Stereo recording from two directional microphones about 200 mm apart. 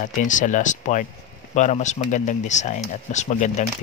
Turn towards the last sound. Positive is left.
turn(degrees=35)  # may be behind; listen again after turning